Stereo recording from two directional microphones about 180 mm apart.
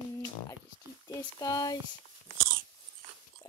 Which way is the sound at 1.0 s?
20° left (ahead or behind).